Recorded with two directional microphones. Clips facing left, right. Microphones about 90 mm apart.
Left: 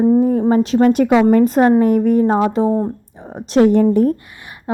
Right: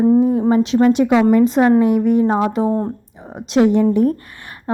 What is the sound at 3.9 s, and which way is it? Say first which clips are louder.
Speech: left 1 dB; 40° left (ahead or behind).